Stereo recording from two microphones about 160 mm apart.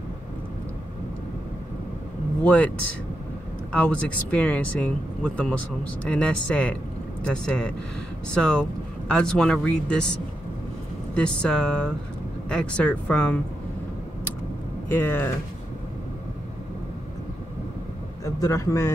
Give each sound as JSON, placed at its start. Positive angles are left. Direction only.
{"t": 2.4, "sound": "speech", "side_deg": 10}
{"t": 3.7, "sound": "speech", "side_deg": 10}
{"t": 14.9, "sound": "speech", "side_deg": 10}
{"t": 18.2, "sound": "a man's voice", "side_deg": 20}